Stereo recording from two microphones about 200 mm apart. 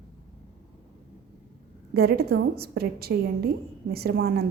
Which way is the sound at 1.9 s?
50° right (ahead or behind).